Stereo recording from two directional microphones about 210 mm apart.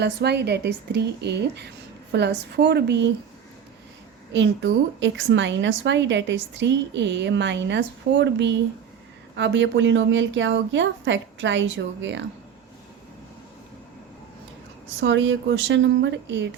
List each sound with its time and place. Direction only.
0.0 s a woman's voice: 55° right (ahead or behind)
4.3 s a woman's voice: 60° right (ahead or behind)
15.0 s a woman's voice: 65° right (ahead or behind)